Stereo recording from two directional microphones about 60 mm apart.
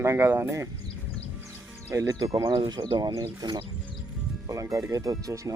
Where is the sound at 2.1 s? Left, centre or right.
Right.